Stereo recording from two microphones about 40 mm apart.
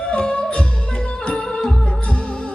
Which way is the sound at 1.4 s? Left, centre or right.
Centre.